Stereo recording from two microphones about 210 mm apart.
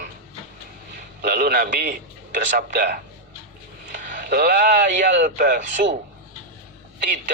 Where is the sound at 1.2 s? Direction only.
45° right (ahead or behind).